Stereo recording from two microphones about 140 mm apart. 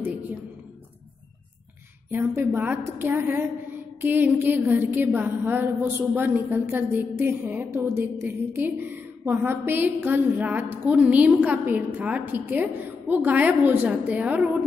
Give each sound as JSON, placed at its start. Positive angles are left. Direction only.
{"t": 2.0, "sound": "a woman's voice", "side_deg": -15}